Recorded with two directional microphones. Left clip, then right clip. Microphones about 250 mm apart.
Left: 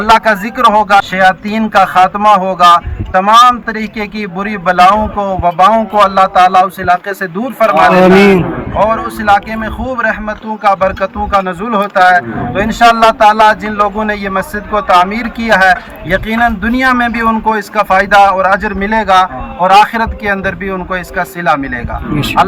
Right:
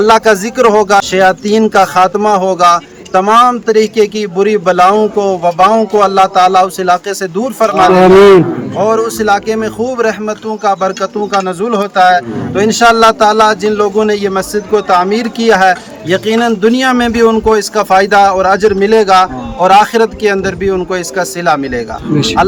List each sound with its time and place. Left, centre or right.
0.0 s speech: centre